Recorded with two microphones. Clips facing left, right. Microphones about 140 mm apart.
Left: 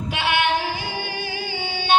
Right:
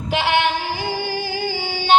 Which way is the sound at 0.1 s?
25° right (ahead or behind).